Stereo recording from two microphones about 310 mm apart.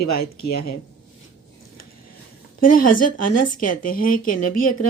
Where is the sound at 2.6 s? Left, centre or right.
Left.